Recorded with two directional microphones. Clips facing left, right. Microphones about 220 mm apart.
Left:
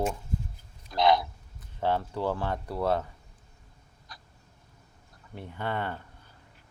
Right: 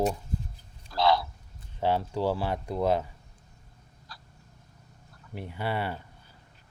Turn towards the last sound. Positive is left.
turn(degrees=-10)  # may be behind; listen again after turning